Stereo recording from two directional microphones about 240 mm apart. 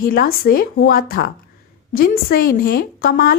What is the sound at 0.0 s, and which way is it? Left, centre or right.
A woman's voice, left.